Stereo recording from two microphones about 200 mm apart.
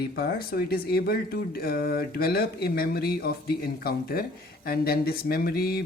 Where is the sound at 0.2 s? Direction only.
50° left (ahead or behind).